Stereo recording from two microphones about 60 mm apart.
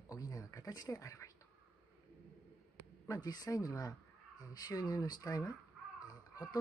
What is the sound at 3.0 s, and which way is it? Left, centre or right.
Speech, left.